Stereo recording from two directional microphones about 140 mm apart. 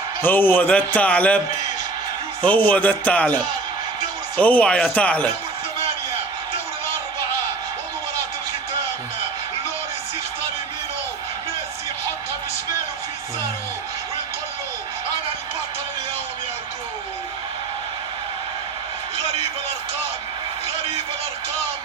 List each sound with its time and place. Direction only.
0.2 s a man's voice: 15° left (ahead or behind)
2.4 s a man's voice: 10° left (ahead or behind)